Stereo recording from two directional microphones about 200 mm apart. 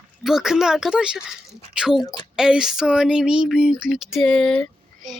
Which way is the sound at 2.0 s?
20° left (ahead or behind).